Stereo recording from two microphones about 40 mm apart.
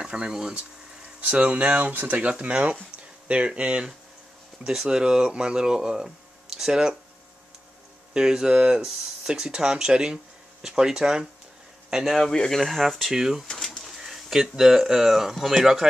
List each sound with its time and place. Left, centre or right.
0.0 s speech: right
1.3 s speech: right
2.2 s speech: right
4.8 s speech: right
8.1 s a man's voice: centre
12.2 s speech: centre
12.5 s speech: centre
13.0 s speech: centre